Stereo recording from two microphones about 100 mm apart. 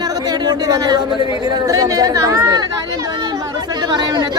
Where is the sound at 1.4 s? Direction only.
35° right (ahead or behind).